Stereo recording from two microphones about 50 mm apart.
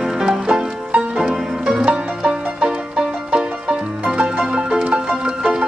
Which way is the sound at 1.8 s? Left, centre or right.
Right.